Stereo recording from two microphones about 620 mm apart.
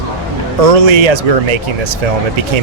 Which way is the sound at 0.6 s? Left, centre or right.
Right.